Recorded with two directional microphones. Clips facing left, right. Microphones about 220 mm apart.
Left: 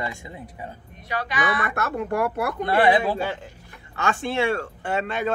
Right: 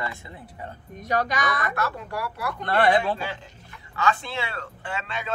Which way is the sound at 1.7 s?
50° left (ahead or behind).